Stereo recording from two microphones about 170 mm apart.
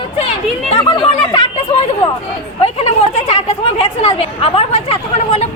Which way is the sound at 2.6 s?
35° left (ahead or behind).